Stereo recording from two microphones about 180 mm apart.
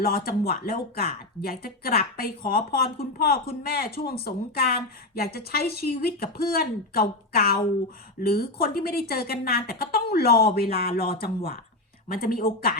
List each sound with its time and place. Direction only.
0.0 s speech: 55° left (ahead or behind)